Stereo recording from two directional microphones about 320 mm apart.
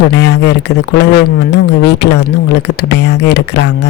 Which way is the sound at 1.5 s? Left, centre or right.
Left.